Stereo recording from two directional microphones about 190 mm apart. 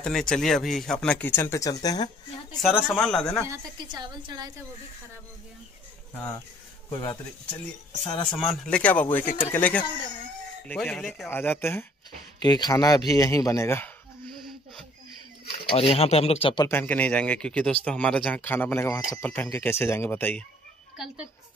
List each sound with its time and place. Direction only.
0.0 s speech: 5° left (ahead or behind); by 2.0 s 20° left (ahead or behind)
2.7 s speech: 5° left (ahead or behind)
3.4 s a woman's voice: 20° right (ahead or behind)
6.9 s speech: 15° left (ahead or behind)
8.3 s speech: centre (ahead or behind)
12.4 s speech: 20° left (ahead or behind)
15.7 s speech: 30° left (ahead or behind)
16.6 s speech: 10° left (ahead or behind)